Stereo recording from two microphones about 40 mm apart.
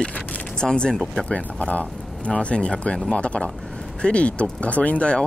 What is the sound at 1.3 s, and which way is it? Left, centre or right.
Speech, left.